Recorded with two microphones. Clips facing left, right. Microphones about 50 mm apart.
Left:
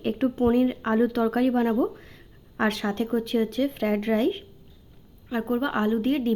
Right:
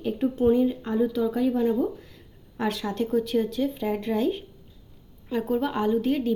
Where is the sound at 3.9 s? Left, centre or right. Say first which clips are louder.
Left 2 dB; left.